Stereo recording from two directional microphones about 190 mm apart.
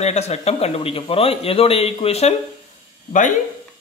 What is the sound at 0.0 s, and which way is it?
Speech, 35° left (ahead or behind).